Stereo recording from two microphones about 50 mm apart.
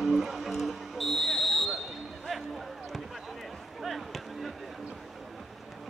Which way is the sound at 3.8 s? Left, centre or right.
Centre.